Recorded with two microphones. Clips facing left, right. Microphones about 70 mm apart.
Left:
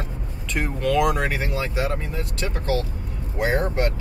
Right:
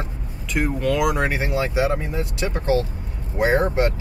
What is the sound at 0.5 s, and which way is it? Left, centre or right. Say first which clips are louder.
Speech: right 1 dB; centre.